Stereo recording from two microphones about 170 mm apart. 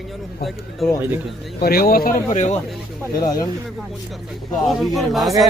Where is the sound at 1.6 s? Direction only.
60° left (ahead or behind); by 2.6 s 45° left (ahead or behind).